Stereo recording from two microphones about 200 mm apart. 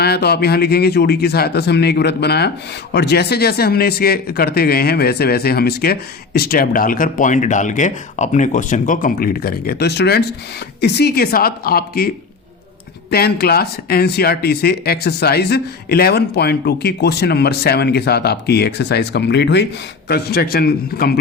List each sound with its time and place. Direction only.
0.0 s speech: 55° left (ahead or behind)